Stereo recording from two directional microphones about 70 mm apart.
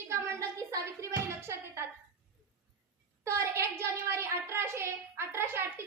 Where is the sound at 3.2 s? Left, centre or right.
Right.